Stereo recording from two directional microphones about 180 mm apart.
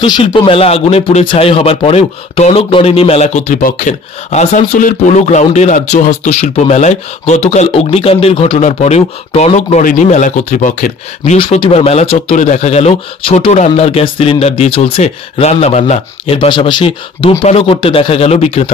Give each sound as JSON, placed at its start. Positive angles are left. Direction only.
{"t": 0.0, "sound": "speech", "side_deg": 25}
{"t": 11.3, "sound": "speech", "side_deg": 30}
{"t": 16.3, "sound": "speech", "side_deg": 25}